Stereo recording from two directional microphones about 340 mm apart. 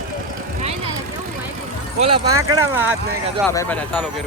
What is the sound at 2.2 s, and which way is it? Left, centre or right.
Speech, right.